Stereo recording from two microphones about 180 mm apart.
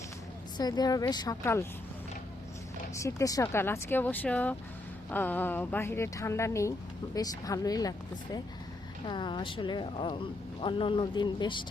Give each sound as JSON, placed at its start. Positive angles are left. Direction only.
{"t": 0.5, "sound": "speech", "side_deg": 20}
{"t": 2.9, "sound": "speech", "side_deg": 15}